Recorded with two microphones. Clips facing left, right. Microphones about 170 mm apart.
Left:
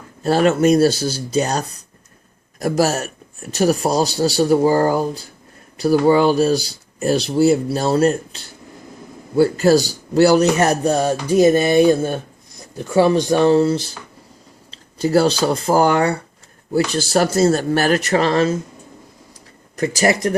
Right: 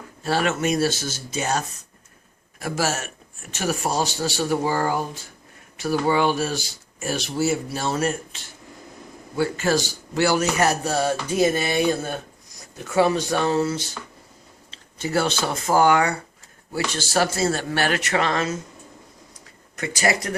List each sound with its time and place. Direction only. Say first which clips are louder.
0.2 s speech: left 8 dB; 40° left (ahead or behind)
19.7 s speech: left 6 dB; 35° left (ahead or behind)